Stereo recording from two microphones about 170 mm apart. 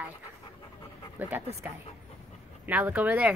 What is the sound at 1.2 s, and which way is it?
Speech, 10° right (ahead or behind).